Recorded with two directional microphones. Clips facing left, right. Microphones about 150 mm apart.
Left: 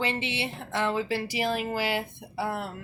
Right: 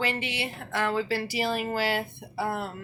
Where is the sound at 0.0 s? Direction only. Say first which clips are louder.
Even; 25° left (ahead or behind).